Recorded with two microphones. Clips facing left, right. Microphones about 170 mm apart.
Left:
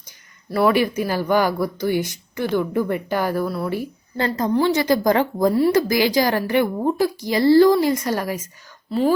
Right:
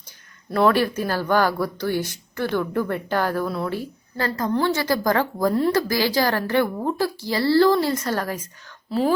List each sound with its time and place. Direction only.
0.5 s a woman's voice: 10° left (ahead or behind)
4.2 s a woman's voice: 20° left (ahead or behind)
8.9 s speech: centre (ahead or behind)